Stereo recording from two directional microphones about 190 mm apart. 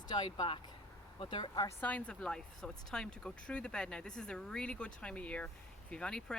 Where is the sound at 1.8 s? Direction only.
5° left (ahead or behind).